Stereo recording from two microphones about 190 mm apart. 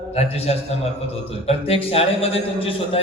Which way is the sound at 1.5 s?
30° left (ahead or behind).